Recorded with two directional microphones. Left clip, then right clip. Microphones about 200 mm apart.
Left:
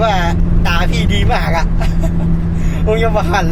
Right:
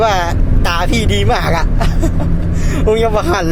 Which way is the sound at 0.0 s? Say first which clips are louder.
Right 1 dB; 45° right (ahead or behind).